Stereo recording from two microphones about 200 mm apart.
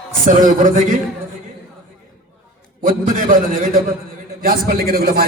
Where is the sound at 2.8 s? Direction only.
40° right (ahead or behind).